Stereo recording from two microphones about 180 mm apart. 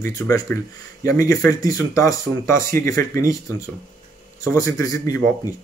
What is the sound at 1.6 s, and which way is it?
Speech, 20° left (ahead or behind).